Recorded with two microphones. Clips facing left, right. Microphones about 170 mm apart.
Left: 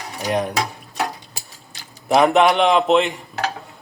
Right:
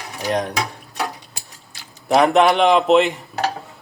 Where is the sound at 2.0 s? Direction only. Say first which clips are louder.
Even; centre (ahead or behind).